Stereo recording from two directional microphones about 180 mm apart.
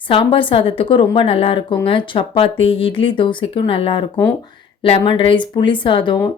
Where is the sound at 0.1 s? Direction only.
30° left (ahead or behind).